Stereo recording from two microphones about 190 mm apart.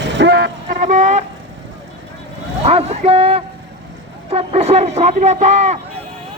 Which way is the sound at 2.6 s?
35° right (ahead or behind).